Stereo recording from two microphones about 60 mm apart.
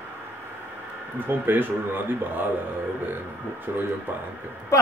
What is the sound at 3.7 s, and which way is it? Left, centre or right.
Speech, right.